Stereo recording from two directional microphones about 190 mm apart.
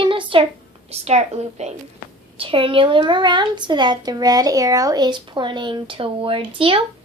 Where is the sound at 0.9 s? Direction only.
35° right (ahead or behind).